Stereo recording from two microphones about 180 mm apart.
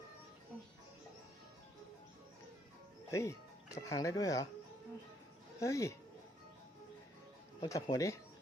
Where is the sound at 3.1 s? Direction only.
15° left (ahead or behind).